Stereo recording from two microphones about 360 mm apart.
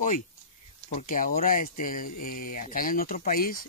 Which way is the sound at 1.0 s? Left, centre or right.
Left.